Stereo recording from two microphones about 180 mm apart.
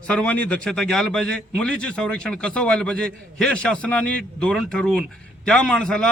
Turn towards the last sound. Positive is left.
turn(degrees=5)  # may be behind; listen again after turning